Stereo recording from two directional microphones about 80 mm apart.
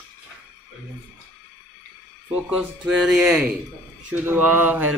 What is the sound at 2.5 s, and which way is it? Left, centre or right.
Speech, centre.